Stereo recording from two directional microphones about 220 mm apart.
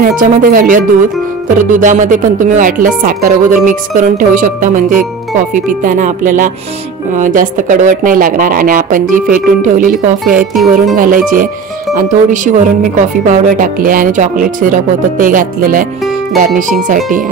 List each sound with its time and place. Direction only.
0.0 s speech: 40° right (ahead or behind)
10.5 s music: centre (ahead or behind)
11.0 s speech: 40° right (ahead or behind)